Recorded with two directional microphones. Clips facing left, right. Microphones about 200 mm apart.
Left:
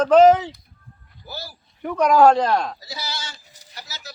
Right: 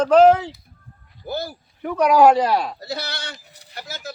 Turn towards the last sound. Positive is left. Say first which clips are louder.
# right 6 dB
turn(degrees=-55)  # may be behind; listen again after turning